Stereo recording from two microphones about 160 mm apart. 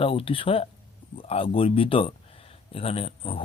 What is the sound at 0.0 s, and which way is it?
Speech, 35° left (ahead or behind).